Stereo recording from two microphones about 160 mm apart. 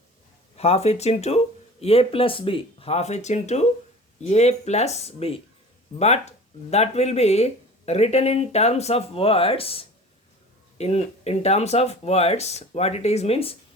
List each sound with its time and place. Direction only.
0.5 s speech: 40° left (ahead or behind)